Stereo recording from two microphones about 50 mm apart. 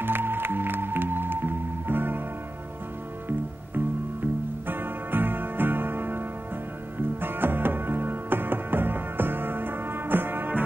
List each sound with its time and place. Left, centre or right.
0.0 s music: right
3.3 s music: right